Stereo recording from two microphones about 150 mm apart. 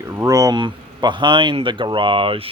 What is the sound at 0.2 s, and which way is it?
Speech, 25° right (ahead or behind).